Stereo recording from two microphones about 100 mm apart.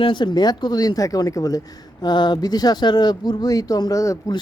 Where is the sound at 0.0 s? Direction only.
55° left (ahead or behind); by 4.2 s 35° left (ahead or behind).